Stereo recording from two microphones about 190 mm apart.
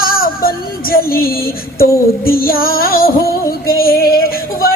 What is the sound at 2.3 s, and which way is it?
A man's voice, 50° left (ahead or behind).